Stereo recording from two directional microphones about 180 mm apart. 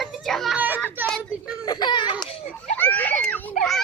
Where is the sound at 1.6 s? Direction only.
25° left (ahead or behind).